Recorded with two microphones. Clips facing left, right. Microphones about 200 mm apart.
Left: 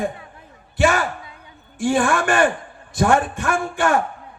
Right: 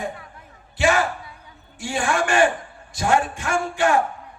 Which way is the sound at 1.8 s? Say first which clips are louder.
Left 5 dB; 55° left (ahead or behind).